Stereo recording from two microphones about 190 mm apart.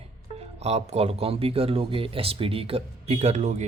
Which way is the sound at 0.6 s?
35° right (ahead or behind).